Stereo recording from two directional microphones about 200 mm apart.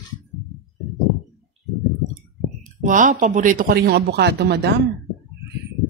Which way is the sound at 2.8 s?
40° right (ahead or behind).